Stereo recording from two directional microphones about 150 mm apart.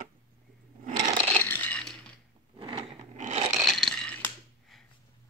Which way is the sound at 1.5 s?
10° left (ahead or behind).